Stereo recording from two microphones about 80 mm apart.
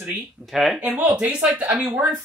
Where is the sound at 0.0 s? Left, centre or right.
Right.